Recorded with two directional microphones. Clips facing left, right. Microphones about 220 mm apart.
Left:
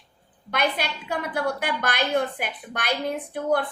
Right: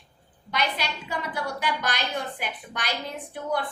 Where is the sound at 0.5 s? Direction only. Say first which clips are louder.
Left 3 dB; 55° left (ahead or behind).